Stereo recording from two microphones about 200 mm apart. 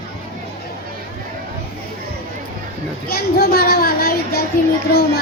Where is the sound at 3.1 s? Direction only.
50° left (ahead or behind).